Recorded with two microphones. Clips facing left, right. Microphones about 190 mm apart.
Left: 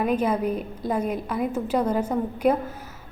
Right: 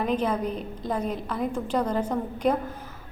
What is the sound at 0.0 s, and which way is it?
A woman's voice, 10° left (ahead or behind).